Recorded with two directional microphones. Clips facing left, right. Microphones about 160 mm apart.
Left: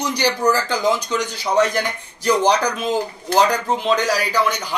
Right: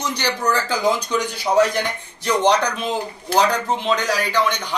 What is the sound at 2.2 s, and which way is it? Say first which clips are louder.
A man's voice: left 1 dB; 5° left (ahead or behind).